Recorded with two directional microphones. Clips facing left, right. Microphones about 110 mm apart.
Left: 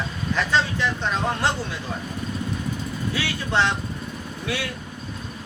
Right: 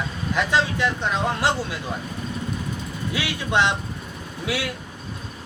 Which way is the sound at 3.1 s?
15° right (ahead or behind).